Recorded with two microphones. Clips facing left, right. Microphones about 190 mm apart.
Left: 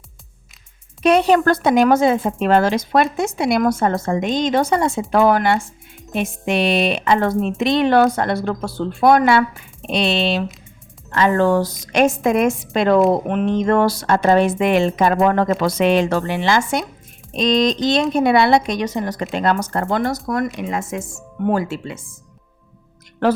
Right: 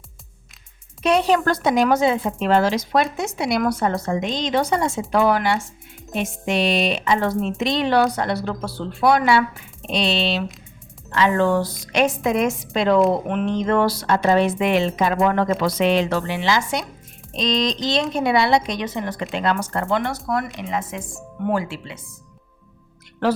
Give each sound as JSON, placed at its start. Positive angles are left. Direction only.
{"t": 1.0, "sound": "a woman's voice", "side_deg": 55}